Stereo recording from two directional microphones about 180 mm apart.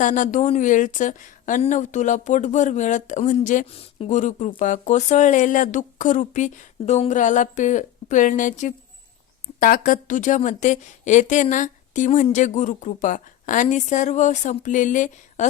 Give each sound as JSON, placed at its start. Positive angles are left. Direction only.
{"t": 0.0, "sound": "speech", "side_deg": 45}
{"t": 3.7, "sound": "speech", "side_deg": 30}